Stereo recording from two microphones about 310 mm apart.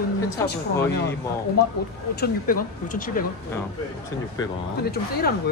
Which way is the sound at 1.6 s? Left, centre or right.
Left.